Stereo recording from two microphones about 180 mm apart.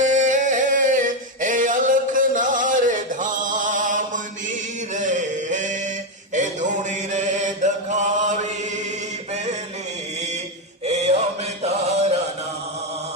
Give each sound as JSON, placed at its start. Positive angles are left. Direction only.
{"t": 0.0, "sound": "music", "side_deg": -45}
{"t": 6.3, "sound": "a sound", "side_deg": -40}
{"t": 7.1, "sound": "chant", "side_deg": -40}
{"t": 10.8, "sound": "music", "side_deg": -35}